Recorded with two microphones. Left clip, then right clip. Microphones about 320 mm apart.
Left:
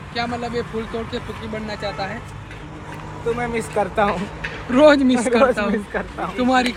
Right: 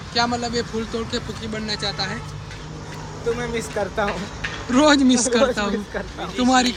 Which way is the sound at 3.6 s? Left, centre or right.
Left.